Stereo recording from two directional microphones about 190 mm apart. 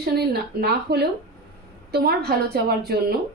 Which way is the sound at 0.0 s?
55° right (ahead or behind).